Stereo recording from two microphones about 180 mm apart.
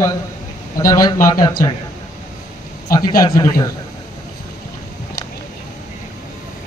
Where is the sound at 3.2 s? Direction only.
20° left (ahead or behind).